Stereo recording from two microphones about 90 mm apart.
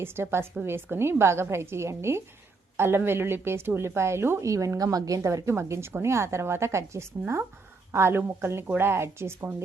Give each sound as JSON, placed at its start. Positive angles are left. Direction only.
{"t": 0.0, "sound": "a woman's voice", "side_deg": -25}